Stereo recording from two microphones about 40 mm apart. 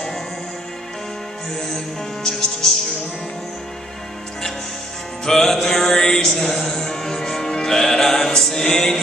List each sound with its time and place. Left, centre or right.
1.5 s music: centre
5.2 s music: centre
8.6 s music: centre